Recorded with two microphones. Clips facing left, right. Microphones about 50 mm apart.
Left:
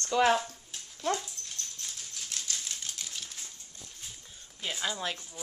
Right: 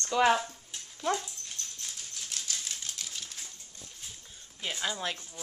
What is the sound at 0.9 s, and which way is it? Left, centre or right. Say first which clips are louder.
Dog: right 1 dB; centre.